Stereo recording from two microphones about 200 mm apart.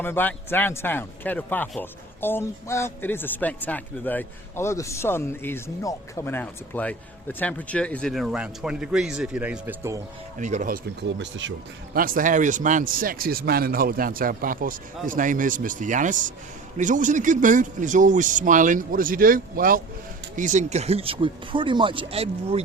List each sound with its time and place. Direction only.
0.0 s a man's voice: 10° left (ahead or behind); by 10.0 s 10° right (ahead or behind)
10.3 s speech: 40° right (ahead or behind)
11.2 s speech: 65° right (ahead or behind)
11.9 s a man's voice: 45° right (ahead or behind)